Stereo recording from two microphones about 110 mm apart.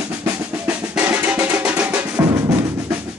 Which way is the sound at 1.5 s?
10° right (ahead or behind).